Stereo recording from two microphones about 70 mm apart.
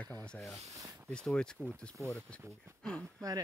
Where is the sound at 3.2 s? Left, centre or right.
Right.